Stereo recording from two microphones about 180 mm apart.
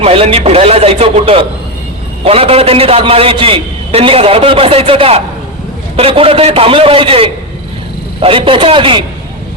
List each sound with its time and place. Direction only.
0.0 s a man's voice: 30° right (ahead or behind)